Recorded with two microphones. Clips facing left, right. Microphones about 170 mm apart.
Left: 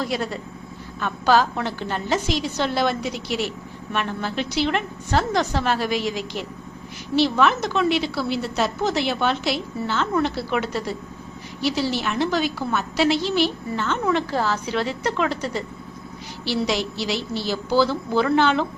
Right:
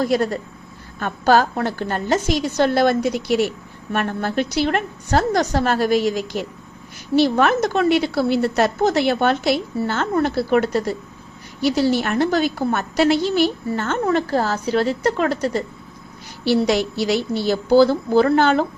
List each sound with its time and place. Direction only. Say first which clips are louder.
0.0 s a woman's voice: right 7 dB; 45° right (ahead or behind)
16.4 s a woman's voice: right 6 dB; 50° right (ahead or behind)